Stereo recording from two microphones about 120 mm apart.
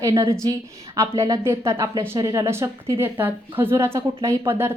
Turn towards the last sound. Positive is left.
turn(degrees=-20)  # may be behind; listen again after turning